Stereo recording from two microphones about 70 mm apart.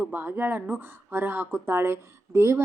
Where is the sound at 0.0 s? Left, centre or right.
Right.